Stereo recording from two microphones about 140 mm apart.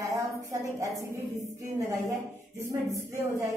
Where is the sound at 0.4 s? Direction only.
25° right (ahead or behind).